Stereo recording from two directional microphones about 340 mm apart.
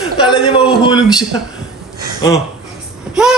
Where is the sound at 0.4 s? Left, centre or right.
Centre.